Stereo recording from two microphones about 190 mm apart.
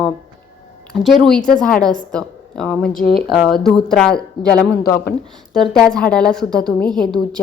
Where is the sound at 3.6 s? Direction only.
Centre (ahead or behind).